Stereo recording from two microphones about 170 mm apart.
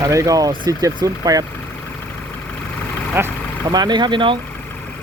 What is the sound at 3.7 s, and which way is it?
Speech, 25° right (ahead or behind).